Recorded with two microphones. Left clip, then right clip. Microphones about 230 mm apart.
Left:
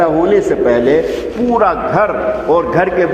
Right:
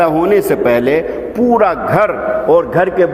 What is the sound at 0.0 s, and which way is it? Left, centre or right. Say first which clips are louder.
A man's voice: even; right.